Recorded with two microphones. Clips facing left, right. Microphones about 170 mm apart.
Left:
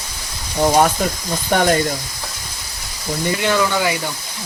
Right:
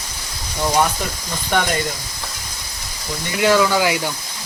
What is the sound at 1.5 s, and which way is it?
Speech, 40° left (ahead or behind).